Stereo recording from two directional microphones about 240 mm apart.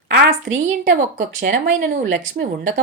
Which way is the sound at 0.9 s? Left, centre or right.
Right.